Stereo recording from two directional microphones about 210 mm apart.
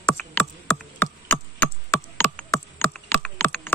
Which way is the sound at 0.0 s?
10° left (ahead or behind).